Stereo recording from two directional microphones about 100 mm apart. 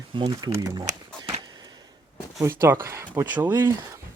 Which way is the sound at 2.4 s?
25° right (ahead or behind).